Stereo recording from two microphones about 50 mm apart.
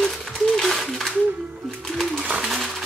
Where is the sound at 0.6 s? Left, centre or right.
Centre.